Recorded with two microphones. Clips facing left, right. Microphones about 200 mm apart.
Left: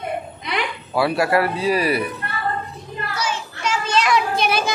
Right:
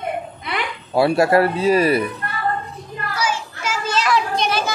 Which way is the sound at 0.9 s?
25° right (ahead or behind).